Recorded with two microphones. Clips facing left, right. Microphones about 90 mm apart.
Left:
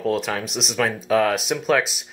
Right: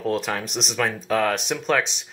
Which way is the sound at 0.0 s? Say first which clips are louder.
Left 2 dB; centre (ahead or behind).